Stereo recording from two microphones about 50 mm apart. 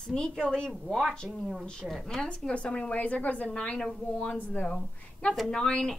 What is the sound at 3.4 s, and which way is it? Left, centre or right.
Speech, centre.